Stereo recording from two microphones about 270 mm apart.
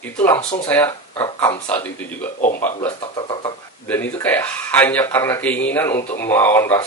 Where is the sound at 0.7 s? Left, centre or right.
Centre.